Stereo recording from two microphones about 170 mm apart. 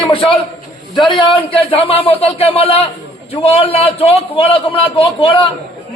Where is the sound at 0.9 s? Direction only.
30° left (ahead or behind).